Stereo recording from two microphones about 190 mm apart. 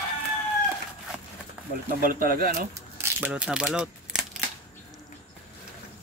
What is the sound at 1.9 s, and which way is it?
Speech, 45° right (ahead or behind).